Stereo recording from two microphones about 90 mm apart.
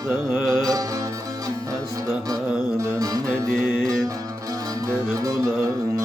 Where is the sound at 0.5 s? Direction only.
40° right (ahead or behind).